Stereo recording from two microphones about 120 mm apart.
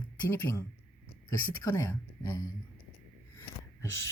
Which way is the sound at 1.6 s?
25° left (ahead or behind).